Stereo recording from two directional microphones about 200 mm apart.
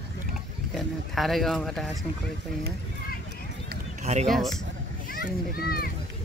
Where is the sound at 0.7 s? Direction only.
Centre (ahead or behind).